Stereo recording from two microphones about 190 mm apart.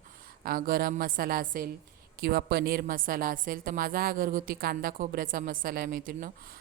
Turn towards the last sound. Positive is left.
turn(degrees=-45)  # may be behind; listen again after turning